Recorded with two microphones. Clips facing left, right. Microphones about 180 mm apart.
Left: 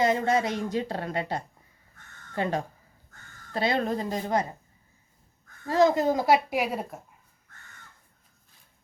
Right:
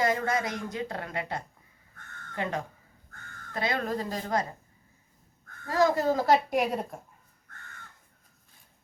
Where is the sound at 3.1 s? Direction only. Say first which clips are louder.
Right 4 dB; 55° right (ahead or behind).